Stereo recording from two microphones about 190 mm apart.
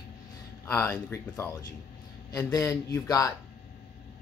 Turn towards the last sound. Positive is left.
turn(degrees=15)  # may be behind; listen again after turning